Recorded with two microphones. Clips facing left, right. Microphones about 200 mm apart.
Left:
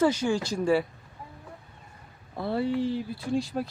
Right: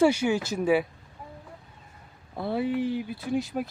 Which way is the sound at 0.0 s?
10° right (ahead or behind).